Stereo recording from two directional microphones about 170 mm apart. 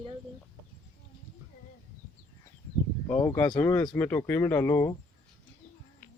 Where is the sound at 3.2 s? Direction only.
15° left (ahead or behind).